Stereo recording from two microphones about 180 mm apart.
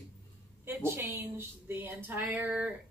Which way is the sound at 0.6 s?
10° right (ahead or behind).